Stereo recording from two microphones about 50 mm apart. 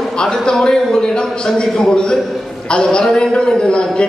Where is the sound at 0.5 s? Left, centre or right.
Centre.